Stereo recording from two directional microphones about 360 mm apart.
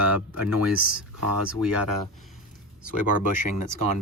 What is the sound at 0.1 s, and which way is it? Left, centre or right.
Speech, centre.